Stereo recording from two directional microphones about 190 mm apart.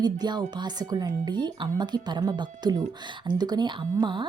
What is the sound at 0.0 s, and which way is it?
Speech, 20° right (ahead or behind).